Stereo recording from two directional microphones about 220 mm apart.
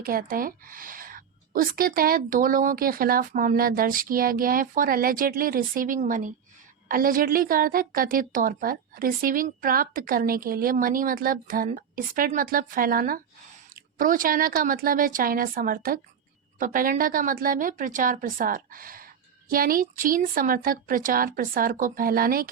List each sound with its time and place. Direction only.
0.0 s a woman's voice: 40° right (ahead or behind)